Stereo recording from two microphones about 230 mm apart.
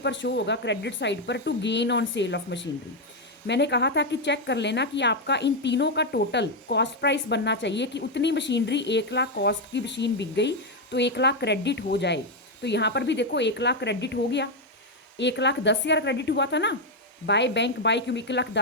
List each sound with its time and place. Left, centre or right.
0.0 s speech: left